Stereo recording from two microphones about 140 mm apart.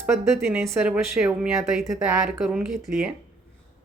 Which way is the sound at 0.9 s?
5° right (ahead or behind).